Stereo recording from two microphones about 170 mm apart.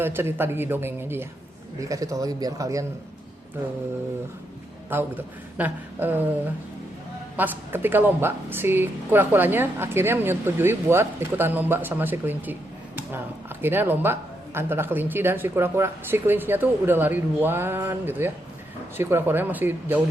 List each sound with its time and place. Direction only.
0.0 s speech: 15° right (ahead or behind)
4.9 s speech: 10° right (ahead or behind)
7.3 s speech: 10° right (ahead or behind)